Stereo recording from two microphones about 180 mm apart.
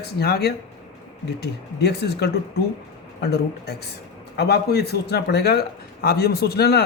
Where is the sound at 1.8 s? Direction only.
65° left (ahead or behind).